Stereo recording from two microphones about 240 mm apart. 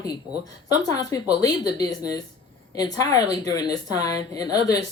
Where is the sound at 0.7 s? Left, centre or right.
Centre.